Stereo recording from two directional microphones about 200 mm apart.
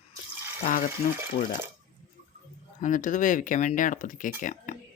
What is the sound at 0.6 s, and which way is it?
Speech, 45° left (ahead or behind).